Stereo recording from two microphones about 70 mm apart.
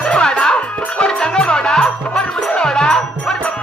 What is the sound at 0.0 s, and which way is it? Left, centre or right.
Music, centre.